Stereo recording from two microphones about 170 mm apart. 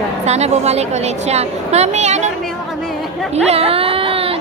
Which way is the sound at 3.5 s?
35° right (ahead or behind).